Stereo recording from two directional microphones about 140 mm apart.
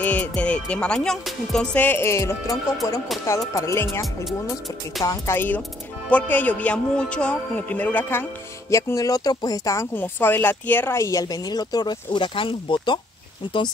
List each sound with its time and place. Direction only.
0.0 s a man's voice: 10° left (ahead or behind)
5.0 s a man's voice: 25° left (ahead or behind)